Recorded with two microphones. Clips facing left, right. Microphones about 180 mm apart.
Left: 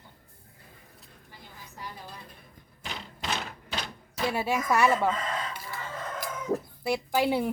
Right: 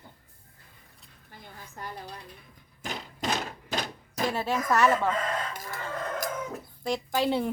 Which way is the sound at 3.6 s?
45° right (ahead or behind).